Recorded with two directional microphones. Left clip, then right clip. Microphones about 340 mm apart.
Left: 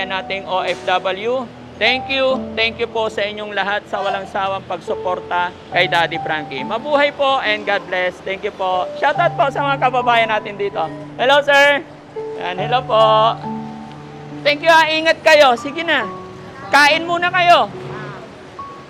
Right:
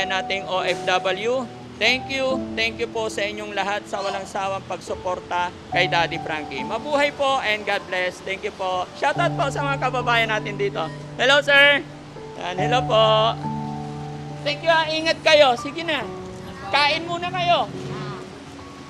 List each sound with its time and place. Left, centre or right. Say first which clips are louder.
0.0 s a man's voice: left 1 dB; centre
14.4 s speech: left 8 dB; left
15.0 s speech: left 5 dB; centre